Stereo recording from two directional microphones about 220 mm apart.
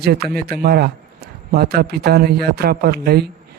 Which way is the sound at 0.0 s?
45° right (ahead or behind).